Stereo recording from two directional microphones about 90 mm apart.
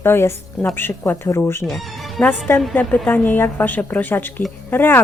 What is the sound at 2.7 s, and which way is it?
A woman's voice, 15° left (ahead or behind).